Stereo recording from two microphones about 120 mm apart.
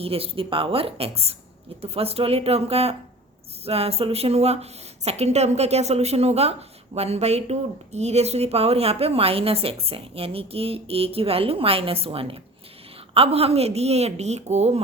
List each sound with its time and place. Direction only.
0.0 s a woman's voice: 50° right (ahead or behind); by 14.8 s 70° right (ahead or behind)